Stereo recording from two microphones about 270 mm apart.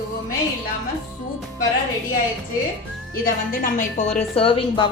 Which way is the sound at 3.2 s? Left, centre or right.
Left.